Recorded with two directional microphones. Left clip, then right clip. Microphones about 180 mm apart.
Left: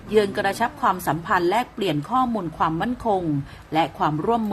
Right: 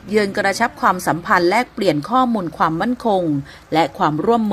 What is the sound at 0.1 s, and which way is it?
A woman's voice, 30° right (ahead or behind).